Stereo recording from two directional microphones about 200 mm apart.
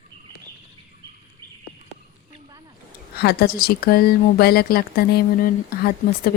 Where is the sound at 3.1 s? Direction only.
50° left (ahead or behind).